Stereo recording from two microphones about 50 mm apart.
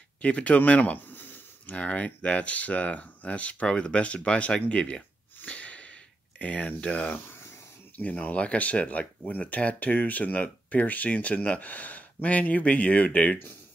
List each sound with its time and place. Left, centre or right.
0.2 s speech: left
1.1 s a sound: left
1.7 s speech: left